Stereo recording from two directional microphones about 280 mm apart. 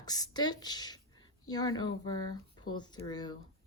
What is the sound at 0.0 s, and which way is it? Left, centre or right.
Speech, centre.